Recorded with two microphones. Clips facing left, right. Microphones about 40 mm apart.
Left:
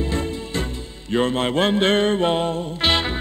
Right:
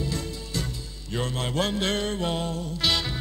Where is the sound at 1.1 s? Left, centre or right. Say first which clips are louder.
Left 8 dB; left.